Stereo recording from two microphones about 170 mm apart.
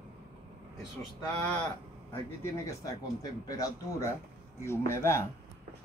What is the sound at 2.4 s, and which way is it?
A man's voice, 20° left (ahead or behind).